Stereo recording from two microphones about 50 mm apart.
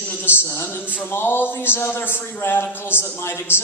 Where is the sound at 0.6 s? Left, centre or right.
Left.